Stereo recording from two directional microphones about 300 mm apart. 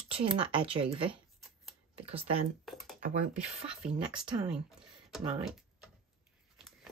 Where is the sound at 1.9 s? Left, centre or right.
Centre.